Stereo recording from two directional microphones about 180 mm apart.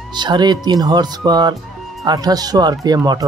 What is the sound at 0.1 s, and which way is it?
Speech, 25° right (ahead or behind).